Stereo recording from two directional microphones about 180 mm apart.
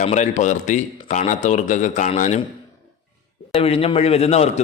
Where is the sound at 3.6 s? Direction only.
35° left (ahead or behind).